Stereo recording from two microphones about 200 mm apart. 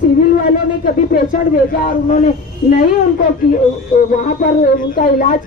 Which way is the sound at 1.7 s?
40° left (ahead or behind).